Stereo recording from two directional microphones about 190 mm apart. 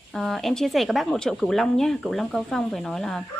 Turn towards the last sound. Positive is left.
turn(degrees=0)  # may be behind; listen again after turning